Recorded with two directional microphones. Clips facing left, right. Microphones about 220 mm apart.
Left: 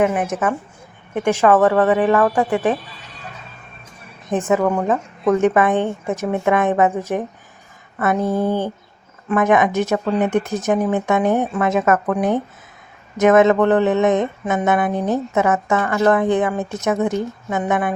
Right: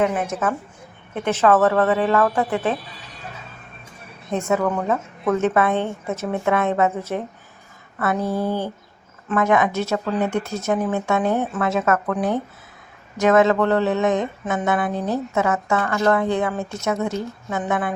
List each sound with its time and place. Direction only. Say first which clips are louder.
0.0 s speech: left 3 dB; 15° left (ahead or behind)
4.3 s speech: left 3 dB; 15° left (ahead or behind)